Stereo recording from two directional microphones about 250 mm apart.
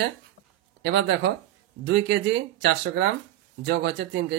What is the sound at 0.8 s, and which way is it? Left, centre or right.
A man's voice, right.